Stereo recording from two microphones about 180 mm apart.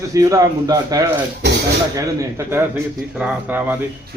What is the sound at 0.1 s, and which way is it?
A man's voice, 20° right (ahead or behind).